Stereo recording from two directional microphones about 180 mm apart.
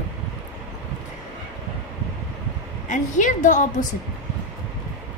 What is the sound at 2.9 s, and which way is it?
A woman's voice, 45° left (ahead or behind).